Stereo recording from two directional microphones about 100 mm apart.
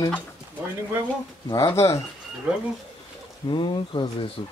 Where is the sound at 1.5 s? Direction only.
30° left (ahead or behind).